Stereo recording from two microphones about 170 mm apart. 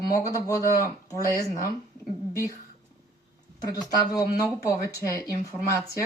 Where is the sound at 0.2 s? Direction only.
20° left (ahead or behind).